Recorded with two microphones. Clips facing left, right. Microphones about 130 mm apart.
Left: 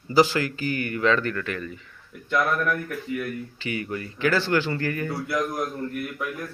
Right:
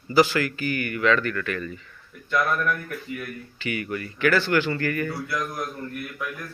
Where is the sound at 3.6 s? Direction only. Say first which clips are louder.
Right 2 dB; 25° left (ahead or behind).